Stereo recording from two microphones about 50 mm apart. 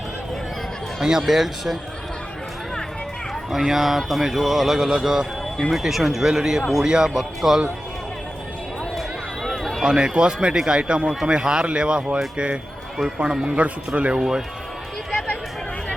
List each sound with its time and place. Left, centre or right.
0.9 s speech: centre
3.5 s a man's voice: centre
9.0 s run: centre
9.8 s speech: centre
13.4 s speech: right
14.2 s speech: centre